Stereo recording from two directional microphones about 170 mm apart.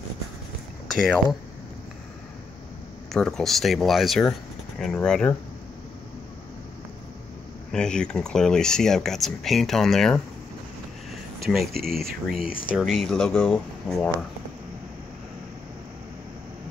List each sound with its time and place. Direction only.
3.1 s speech: 5° left (ahead or behind)
7.7 s speech: 5° left (ahead or behind)
11.4 s speech: centre (ahead or behind)
11.7 s speech: 60° right (ahead or behind)
12.7 s speech: centre (ahead or behind)